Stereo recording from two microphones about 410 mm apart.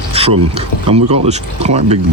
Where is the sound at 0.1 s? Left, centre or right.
Centre.